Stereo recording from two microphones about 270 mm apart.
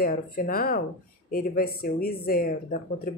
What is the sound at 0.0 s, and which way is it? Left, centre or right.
Speech, left.